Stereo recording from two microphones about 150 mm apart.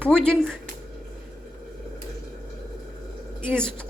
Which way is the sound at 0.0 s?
5° left (ahead or behind).